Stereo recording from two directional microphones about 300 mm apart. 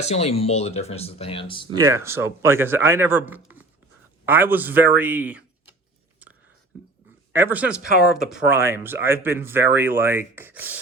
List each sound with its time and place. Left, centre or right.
0.0 s speech: left
1.7 s a man's voice: centre
7.3 s a man's voice: centre